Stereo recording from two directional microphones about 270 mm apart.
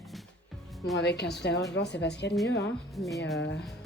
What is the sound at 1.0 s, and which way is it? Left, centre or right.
Speech, left.